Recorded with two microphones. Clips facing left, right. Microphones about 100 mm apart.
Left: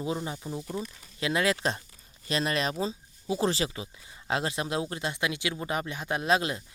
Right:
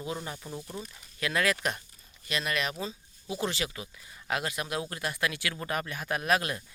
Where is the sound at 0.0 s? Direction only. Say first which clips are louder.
Left 4 dB; 20° left (ahead or behind).